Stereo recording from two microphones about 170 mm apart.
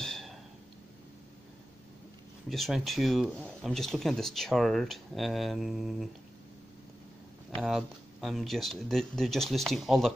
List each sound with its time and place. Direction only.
0.0 s a sound: centre (ahead or behind)
2.5 s speech: centre (ahead or behind)
7.6 s speech: centre (ahead or behind)